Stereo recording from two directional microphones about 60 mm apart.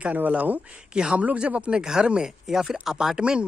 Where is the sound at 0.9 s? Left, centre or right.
Centre.